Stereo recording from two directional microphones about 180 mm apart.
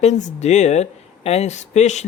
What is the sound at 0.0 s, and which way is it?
Speech, 40° left (ahead or behind).